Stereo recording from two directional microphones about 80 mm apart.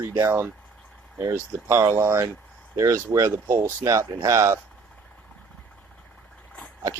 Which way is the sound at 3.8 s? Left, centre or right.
Right.